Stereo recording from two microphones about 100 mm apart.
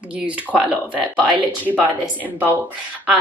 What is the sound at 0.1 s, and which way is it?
Speech, 15° right (ahead or behind).